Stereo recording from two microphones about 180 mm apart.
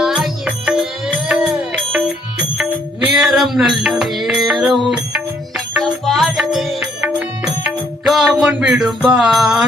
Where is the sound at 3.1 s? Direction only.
Centre (ahead or behind).